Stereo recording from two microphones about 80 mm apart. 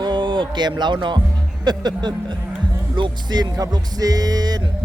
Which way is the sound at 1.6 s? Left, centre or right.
Right.